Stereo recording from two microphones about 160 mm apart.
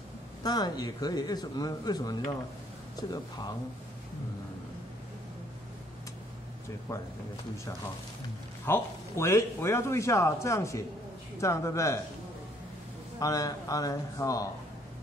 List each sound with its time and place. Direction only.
0.4 s speech: 25° left (ahead or behind)
6.9 s speech: 20° left (ahead or behind)
8.6 s a man's voice: 15° left (ahead or behind)
13.2 s speech: 20° left (ahead or behind)